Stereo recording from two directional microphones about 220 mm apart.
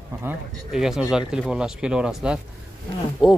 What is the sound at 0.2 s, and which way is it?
Speech, 5° right (ahead or behind).